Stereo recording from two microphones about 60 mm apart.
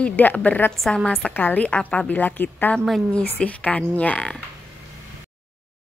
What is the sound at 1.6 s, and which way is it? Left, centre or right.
A woman's voice, centre.